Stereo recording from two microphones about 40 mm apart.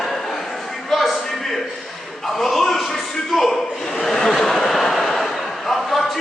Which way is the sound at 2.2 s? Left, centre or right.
Centre.